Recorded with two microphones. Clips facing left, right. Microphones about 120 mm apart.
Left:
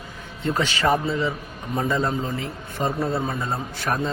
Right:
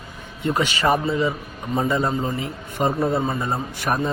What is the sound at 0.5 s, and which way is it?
Speech, 10° right (ahead or behind).